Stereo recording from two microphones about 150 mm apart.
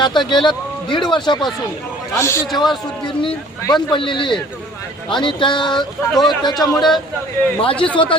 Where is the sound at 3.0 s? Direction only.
35° left (ahead or behind).